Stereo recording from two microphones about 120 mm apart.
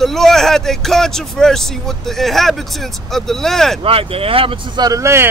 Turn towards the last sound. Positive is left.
turn(degrees=-25)  # may be behind; listen again after turning